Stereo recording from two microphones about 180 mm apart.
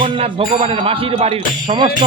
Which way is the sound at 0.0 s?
30° right (ahead or behind).